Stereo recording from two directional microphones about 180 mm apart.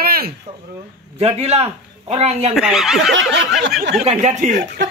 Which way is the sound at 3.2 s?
90° right.